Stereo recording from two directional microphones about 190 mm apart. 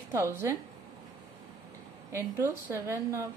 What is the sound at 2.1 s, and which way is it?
A woman's voice, 15° right (ahead or behind).